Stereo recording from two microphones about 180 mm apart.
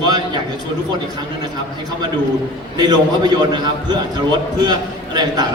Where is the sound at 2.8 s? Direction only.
25° right (ahead or behind).